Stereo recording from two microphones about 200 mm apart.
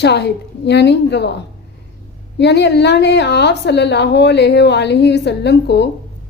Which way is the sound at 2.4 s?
60° left (ahead or behind).